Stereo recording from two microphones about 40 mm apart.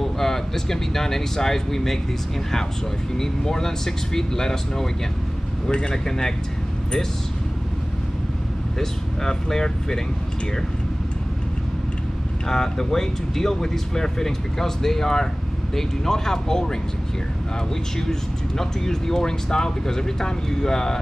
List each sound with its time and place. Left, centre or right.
0.0 s speech: centre
3.2 s speech: centre
8.7 s speech: centre
12.4 s speech: centre
18.6 s speech: centre